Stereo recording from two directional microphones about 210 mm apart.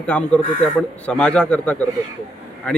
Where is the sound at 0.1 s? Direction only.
5° left (ahead or behind).